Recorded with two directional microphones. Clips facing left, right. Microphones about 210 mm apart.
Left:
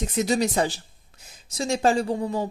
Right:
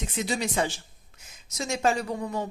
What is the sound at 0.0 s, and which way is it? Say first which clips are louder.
A woman's voice: left 6 dB; 40° left (ahead or behind).